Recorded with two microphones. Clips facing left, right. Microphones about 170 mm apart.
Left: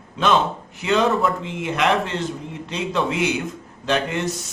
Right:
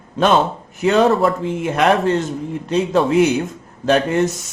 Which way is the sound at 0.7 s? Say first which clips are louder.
Right 5 dB; 45° right (ahead or behind).